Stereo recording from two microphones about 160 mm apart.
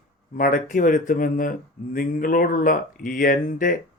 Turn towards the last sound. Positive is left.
turn(degrees=55)  # may be behind; listen again after turning